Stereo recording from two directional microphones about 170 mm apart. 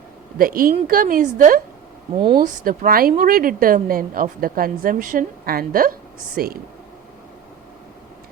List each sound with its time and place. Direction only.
0.3 s a woman's voice: 60° right (ahead or behind)